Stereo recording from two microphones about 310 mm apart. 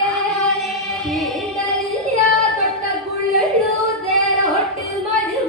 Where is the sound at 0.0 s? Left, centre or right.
Centre.